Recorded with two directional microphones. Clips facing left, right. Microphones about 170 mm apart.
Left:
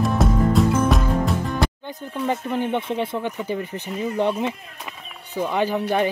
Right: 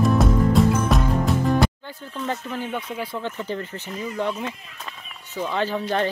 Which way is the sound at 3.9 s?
25° left (ahead or behind).